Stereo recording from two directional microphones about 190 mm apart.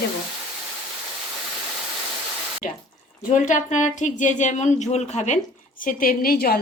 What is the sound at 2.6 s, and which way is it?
A woman's voice, 45° left (ahead or behind).